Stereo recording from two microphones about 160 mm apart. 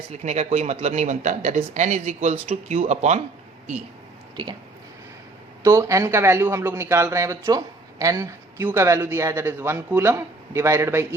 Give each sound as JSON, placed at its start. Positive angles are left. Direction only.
{"t": 0.1, "sound": "speech", "side_deg": -45}
{"t": 5.6, "sound": "a man's voice", "side_deg": -20}